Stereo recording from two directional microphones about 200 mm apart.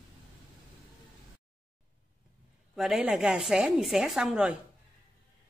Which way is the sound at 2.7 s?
Centre (ahead or behind).